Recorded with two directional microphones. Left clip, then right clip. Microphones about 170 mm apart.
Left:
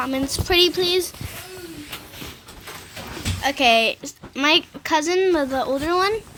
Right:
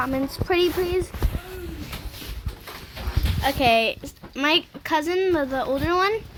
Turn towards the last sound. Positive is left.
turn(degrees=5)  # may be behind; listen again after turning